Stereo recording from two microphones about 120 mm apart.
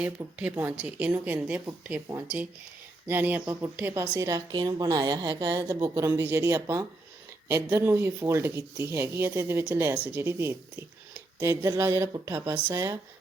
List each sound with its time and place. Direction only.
0.0 s speech: 10° right (ahead or behind)
3.1 s speech: 15° right (ahead or behind)
4.3 s a woman's voice: 30° right (ahead or behind)
12.7 s speech: 30° right (ahead or behind)